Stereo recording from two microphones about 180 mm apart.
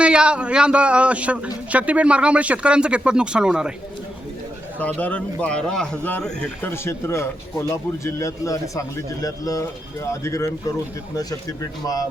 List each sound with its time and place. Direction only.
0.0 s a man's voice: 5° right (ahead or behind)
4.8 s speech: 10° left (ahead or behind)